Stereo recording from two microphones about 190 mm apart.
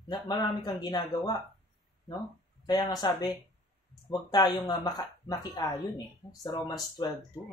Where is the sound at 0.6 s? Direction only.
20° left (ahead or behind).